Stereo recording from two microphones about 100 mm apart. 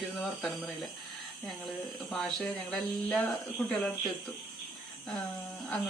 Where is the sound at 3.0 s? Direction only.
15° left (ahead or behind).